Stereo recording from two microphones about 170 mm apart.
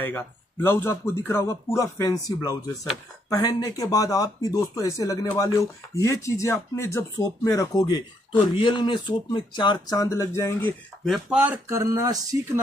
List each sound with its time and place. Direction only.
0.0 s a man's voice: 15° left (ahead or behind)
11.1 s speech: 5° right (ahead or behind); by 12.4 s 20° right (ahead or behind)